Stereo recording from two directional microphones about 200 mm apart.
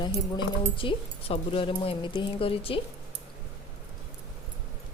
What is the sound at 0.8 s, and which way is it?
Speech, 25° left (ahead or behind).